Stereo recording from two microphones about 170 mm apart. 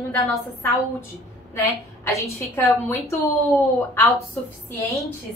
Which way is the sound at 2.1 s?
15° left (ahead or behind).